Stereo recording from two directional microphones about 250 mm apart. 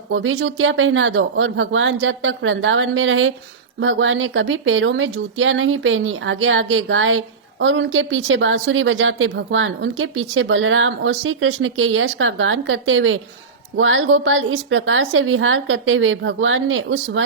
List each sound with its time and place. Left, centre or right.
0.1 s speech: right